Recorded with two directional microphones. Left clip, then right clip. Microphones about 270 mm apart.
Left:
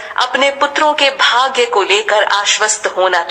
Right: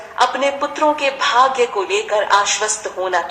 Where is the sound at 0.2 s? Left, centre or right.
Left.